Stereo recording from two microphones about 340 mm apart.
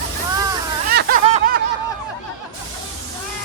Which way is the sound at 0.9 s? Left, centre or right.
Right.